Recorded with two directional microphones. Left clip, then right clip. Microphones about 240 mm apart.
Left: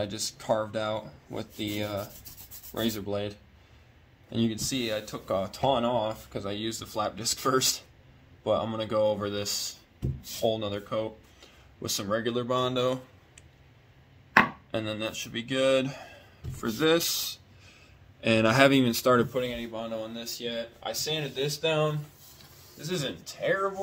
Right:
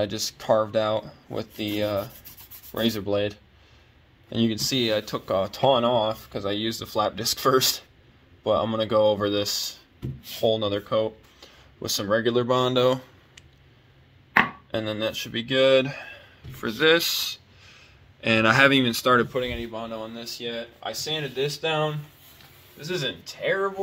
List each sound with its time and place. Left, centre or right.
0.0 s speech: right
14.7 s speech: right
16.0 s a man's voice: centre
19.3 s speech: right